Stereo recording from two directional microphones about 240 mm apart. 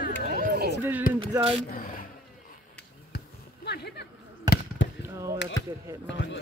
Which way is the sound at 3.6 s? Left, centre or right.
Left.